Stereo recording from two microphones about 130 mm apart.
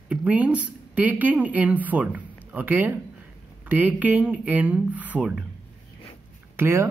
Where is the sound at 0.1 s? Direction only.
10° right (ahead or behind).